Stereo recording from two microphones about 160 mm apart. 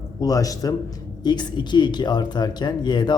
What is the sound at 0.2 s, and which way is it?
A man's voice, 20° left (ahead or behind).